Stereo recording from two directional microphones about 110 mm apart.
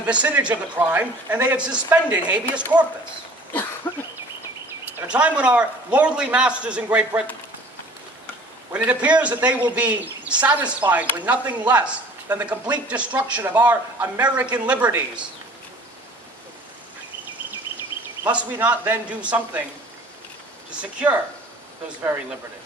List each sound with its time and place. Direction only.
0.0 s speech: 10° right (ahead or behind)
3.9 s a sound: 20° left (ahead or behind)
5.0 s speech: 10° right (ahead or behind)
8.7 s speech: 15° right (ahead or behind)
18.2 s speech: 15° right (ahead or behind)